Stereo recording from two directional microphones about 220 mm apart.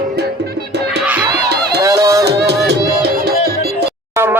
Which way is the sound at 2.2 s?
50° right (ahead or behind).